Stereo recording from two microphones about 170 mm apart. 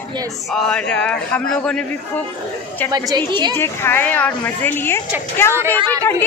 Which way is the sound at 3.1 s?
25° right (ahead or behind).